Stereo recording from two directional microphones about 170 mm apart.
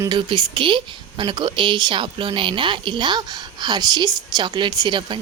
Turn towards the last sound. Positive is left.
turn(degrees=-30)  # may be behind; listen again after turning